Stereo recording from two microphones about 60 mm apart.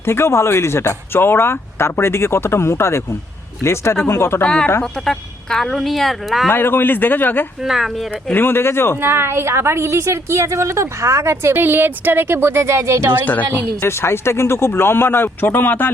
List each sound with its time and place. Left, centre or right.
0.0 s speech: left
4.4 s speech: centre
6.5 s speech: left
7.6 s speech: centre
8.1 s speech: left
9.0 s a woman's voice: right
11.5 s a woman's voice: right
13.2 s a woman's voice: left
13.7 s speech: left